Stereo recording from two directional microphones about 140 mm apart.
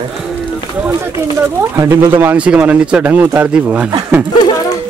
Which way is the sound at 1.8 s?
20° right (ahead or behind).